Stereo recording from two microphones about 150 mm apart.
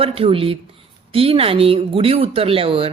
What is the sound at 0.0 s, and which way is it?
Speech, 40° right (ahead or behind).